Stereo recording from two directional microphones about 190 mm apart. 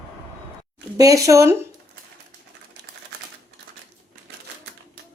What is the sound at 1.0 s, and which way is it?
Speech, 15° right (ahead or behind).